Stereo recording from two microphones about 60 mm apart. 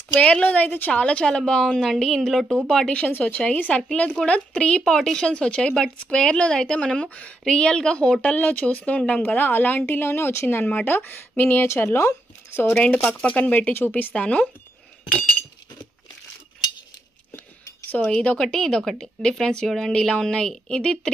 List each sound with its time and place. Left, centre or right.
0.2 s a woman's voice: left
0.9 s a woman's voice: centre
3.1 s a woman's voice: left
10.6 s speech: left
11.6 s speech: left
12.4 s a sound: left
12.7 s speech: left
14.1 s a woman's voice: centre
18.0 s a woman's voice: left
18.4 s a woman's voice: centre